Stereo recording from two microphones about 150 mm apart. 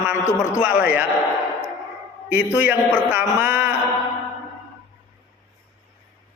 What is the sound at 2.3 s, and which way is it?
A man's voice, 10° right (ahead or behind).